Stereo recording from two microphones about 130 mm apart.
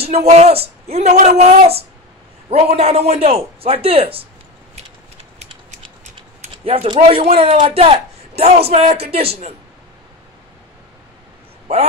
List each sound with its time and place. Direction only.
0.0 s speech: 55° right (ahead or behind)
6.4 s a sound: 50° right (ahead or behind)
7.1 s speech: 45° right (ahead or behind)